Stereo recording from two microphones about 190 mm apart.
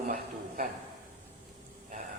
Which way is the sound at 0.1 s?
45° right (ahead or behind).